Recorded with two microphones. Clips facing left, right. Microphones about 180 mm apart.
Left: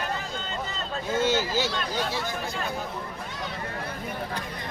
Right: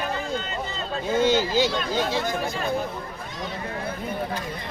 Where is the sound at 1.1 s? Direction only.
15° right (ahead or behind).